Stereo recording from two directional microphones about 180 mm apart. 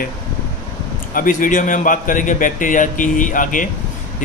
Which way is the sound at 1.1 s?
50° left (ahead or behind).